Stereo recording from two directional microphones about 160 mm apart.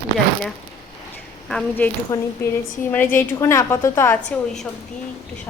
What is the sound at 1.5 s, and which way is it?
Speech, 5° left (ahead or behind).